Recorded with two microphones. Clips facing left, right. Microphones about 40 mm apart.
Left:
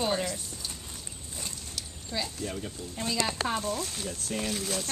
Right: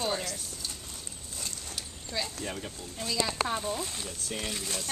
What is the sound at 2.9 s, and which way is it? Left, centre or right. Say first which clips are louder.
Speech: left 2 dB; left.